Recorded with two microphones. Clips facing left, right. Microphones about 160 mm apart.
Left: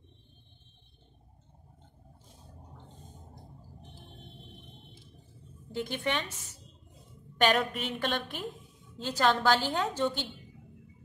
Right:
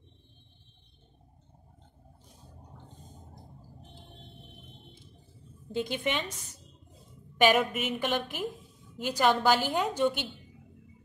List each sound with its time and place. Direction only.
5.7 s a woman's voice: 15° right (ahead or behind)
7.4 s a woman's voice: 5° right (ahead or behind)